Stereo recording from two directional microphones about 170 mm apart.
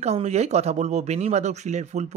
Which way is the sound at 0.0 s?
40° right (ahead or behind).